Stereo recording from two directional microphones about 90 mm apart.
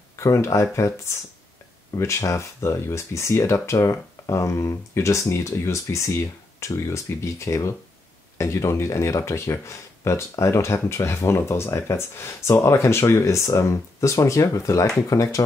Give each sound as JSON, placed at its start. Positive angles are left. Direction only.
{"t": 0.1, "sound": "speech", "side_deg": 30}